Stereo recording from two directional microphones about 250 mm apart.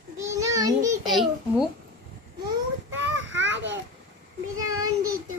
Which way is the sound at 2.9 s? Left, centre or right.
Right.